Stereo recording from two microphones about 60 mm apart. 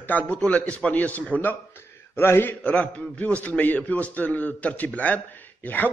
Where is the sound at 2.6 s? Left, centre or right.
Left.